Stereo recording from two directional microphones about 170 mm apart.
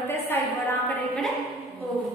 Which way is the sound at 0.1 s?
10° left (ahead or behind).